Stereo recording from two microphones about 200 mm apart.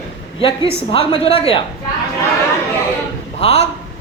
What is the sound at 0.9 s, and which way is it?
Speech, 25° left (ahead or behind).